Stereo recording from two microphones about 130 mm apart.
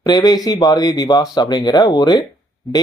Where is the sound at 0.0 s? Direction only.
30° left (ahead or behind).